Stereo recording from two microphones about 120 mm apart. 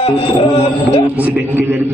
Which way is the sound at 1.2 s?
15° right (ahead or behind).